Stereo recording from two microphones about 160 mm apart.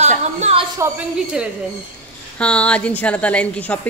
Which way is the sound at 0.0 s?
45° right (ahead or behind).